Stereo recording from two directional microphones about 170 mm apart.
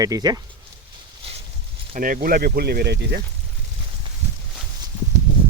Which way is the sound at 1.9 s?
55° right (ahead or behind).